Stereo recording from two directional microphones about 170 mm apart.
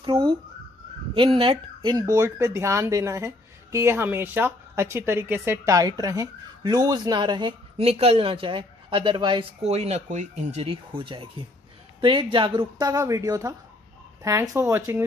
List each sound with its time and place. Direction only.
0.0 s speech: 30° right (ahead or behind); by 15.0 s 15° right (ahead or behind)